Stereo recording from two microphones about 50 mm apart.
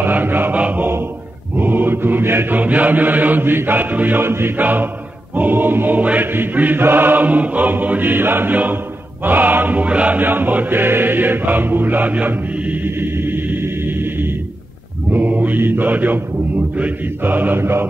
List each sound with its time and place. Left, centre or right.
0.0 s chant: right
1.6 s mantra: right
2.5 s chant: right
4.2 s music: right
4.6 s chant: right
10.2 s chant: right
15.0 s mantra: right
17.2 s chant: right
17.6 s music: right